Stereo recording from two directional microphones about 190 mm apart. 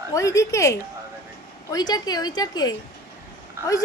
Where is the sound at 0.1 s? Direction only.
15° left (ahead or behind).